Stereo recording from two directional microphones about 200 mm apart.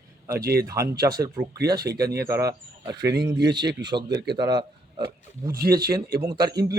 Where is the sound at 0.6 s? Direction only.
15° right (ahead or behind).